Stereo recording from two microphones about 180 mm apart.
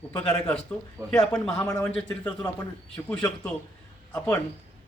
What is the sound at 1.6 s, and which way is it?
Speech, 15° left (ahead or behind).